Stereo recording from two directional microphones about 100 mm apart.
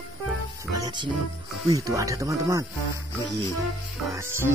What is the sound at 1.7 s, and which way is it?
Speech, 35° right (ahead or behind).